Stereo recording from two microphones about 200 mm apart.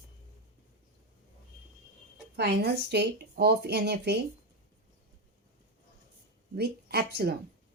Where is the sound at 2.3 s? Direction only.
55° right (ahead or behind).